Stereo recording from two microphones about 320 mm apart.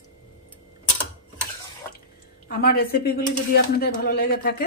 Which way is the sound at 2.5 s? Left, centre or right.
Left.